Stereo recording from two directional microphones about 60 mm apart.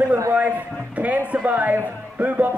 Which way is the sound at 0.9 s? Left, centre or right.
Right.